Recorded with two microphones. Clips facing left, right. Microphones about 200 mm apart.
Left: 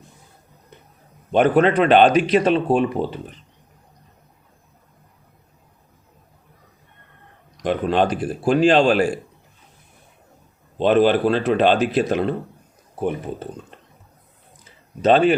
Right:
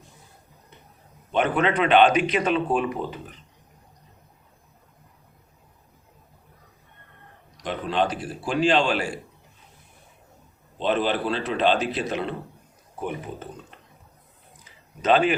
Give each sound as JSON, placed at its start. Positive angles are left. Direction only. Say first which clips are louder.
{"t": 1.3, "sound": "speech", "louder": "left 7 dB", "side_deg": 40}
{"t": 7.6, "sound": "speech", "louder": "left 6 dB", "side_deg": 50}
{"t": 10.8, "sound": "speech", "louder": "left 8 dB", "side_deg": 50}
{"t": 13.0, "sound": "speech", "louder": "left 7 dB", "side_deg": 35}
{"t": 15.0, "sound": "speech", "louder": "left 5 dB", "side_deg": 35}